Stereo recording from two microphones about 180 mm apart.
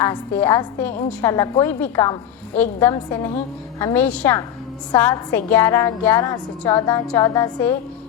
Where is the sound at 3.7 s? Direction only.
10° left (ahead or behind).